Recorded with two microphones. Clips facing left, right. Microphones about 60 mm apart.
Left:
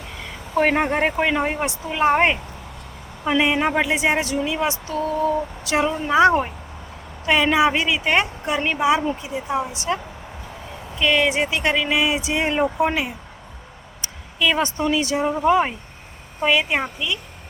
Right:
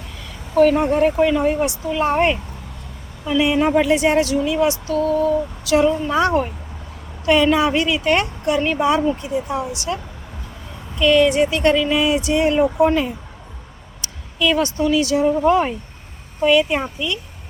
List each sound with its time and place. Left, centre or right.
0.7 s speech: left
1.1 s speech: left
3.2 s speech: left
5.8 s speech: left
11.1 s speech: centre
12.9 s speech: centre
14.3 s speech: left
15.4 s speech: centre
16.4 s speech: left